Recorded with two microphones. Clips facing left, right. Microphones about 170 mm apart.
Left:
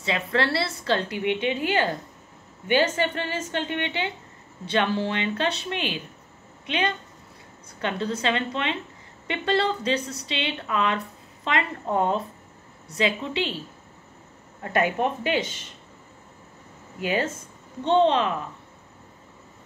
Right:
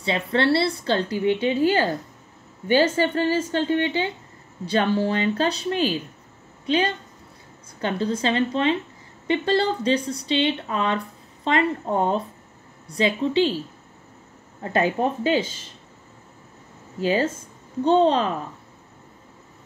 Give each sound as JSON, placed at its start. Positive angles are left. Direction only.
{"t": 0.0, "sound": "a woman's voice", "side_deg": -30}
{"t": 14.6, "sound": "speech", "side_deg": -25}
{"t": 17.0, "sound": "a woman's voice", "side_deg": -30}